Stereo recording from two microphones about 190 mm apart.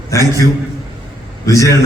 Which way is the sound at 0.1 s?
15° left (ahead or behind).